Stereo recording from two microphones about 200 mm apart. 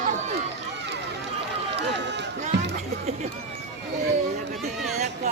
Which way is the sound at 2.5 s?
60° right (ahead or behind).